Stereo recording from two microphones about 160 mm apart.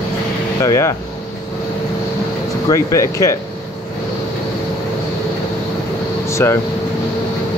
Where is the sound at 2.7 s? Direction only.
20° left (ahead or behind).